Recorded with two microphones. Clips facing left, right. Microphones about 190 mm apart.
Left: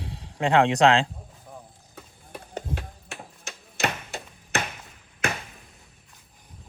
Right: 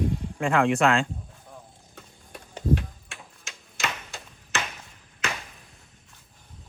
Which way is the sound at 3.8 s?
60° left (ahead or behind).